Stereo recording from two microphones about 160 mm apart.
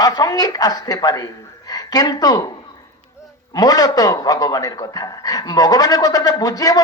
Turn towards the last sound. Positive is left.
turn(degrees=20)  # may be behind; listen again after turning